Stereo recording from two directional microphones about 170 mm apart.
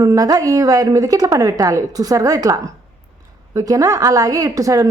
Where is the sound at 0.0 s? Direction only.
20° right (ahead or behind).